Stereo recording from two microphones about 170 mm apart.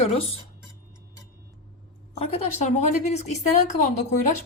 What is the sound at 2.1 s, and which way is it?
A woman's voice, 35° left (ahead or behind).